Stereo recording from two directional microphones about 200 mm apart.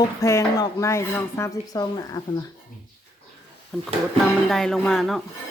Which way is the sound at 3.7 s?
5° left (ahead or behind).